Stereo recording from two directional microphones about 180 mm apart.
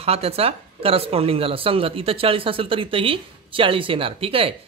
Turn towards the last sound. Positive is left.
turn(degrees=-30)  # may be behind; listen again after turning